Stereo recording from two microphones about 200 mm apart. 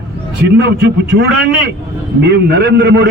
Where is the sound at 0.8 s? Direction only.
55° right (ahead or behind).